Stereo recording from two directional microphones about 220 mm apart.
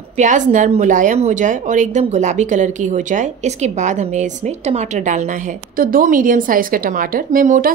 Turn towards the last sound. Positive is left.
turn(degrees=-40)  # may be behind; listen again after turning